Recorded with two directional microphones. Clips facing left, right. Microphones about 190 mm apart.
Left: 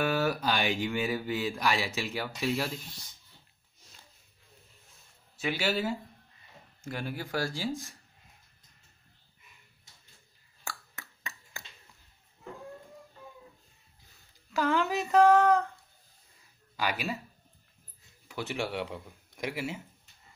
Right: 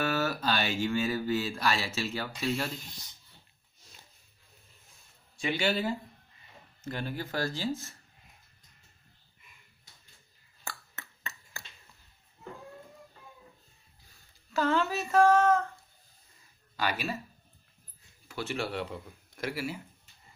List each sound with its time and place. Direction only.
0.0 s speech: 15° left (ahead or behind)
5.4 s speech: 5° left (ahead or behind)
10.6 s finger snapping: 10° left (ahead or behind)
14.5 s speech: 15° left (ahead or behind)
16.7 s speech: 10° left (ahead or behind)
18.3 s speech: 15° left (ahead or behind)